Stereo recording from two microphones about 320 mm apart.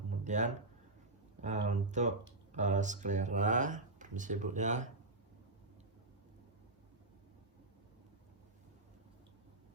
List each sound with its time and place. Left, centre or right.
0.3 s speech: right